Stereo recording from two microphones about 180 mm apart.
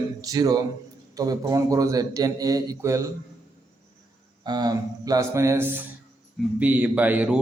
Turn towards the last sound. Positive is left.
turn(degrees=-10)  # may be behind; listen again after turning